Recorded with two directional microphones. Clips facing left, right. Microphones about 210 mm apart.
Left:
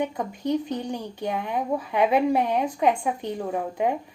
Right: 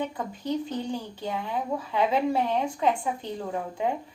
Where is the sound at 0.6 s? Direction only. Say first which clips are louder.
Left 1 dB; 15° left (ahead or behind).